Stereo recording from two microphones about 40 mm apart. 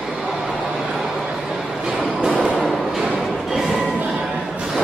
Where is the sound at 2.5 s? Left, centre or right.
Left.